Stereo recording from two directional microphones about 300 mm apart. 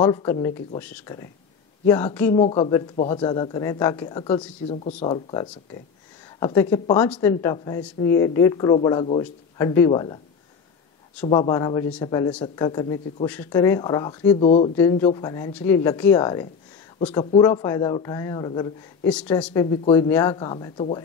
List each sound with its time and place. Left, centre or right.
0.0 s speech: centre
2.3 s speech: centre
11.2 s speech: centre
19.0 s speech: centre